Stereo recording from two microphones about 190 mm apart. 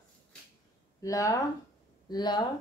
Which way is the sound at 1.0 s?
15° left (ahead or behind).